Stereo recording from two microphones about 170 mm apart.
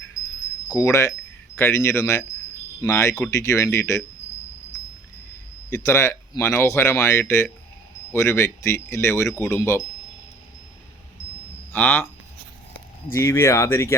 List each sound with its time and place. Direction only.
0.8 s speech: 20° left (ahead or behind)
5.8 s speech: 15° left (ahead or behind)
11.7 s speech: 10° left (ahead or behind)
13.1 s speech: 15° left (ahead or behind)